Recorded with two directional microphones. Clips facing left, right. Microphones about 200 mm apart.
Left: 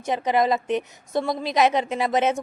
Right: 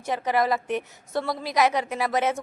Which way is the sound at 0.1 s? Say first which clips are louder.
Left 3 dB; 20° left (ahead or behind).